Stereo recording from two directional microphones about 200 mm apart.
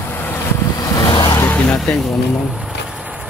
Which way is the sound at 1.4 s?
5° left (ahead or behind).